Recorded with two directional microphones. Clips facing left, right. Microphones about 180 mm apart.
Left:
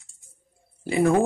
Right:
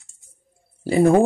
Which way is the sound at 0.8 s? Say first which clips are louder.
Right 5 dB; 35° right (ahead or behind).